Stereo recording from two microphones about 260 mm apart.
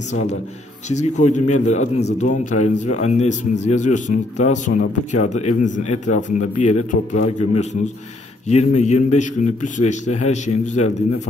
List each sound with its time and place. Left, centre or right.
0.1 s speech: left
8.5 s speech: left